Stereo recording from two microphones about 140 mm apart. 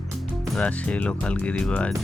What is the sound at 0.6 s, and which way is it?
Speech, 10° left (ahead or behind).